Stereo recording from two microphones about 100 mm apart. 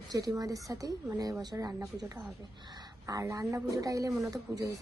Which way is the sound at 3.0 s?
35° right (ahead or behind).